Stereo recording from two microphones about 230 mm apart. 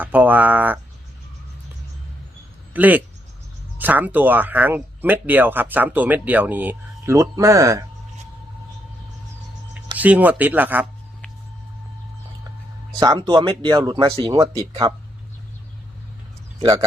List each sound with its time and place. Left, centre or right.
0.0 s speech: centre
2.7 s speech: centre
10.0 s speech: centre
13.0 s speech: centre
16.6 s speech: centre